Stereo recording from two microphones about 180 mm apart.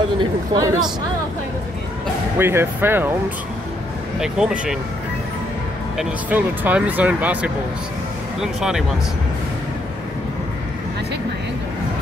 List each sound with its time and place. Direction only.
0.2 s speech: 20° right (ahead or behind)
2.3 s speech: 15° right (ahead or behind)
4.2 s speech: 5° right (ahead or behind)
5.9 s speech: 10° right (ahead or behind)